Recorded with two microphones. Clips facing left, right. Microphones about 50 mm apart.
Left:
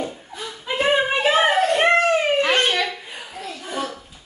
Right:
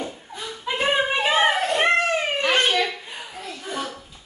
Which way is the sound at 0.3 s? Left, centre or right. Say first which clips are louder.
Even; centre.